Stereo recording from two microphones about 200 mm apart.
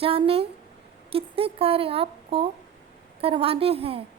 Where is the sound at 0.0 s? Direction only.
30° right (ahead or behind).